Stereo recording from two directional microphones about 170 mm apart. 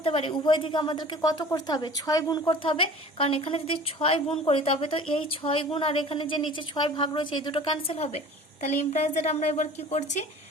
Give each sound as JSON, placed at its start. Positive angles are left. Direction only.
{"t": 0.0, "sound": "a woman's voice", "side_deg": 35}